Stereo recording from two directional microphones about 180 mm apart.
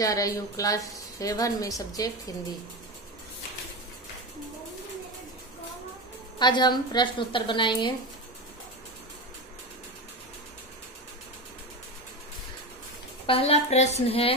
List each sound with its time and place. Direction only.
0.0 s a woman's voice: 20° left (ahead or behind)
6.4 s a woman's voice: 25° left (ahead or behind)
13.3 s a woman's voice: 35° left (ahead or behind)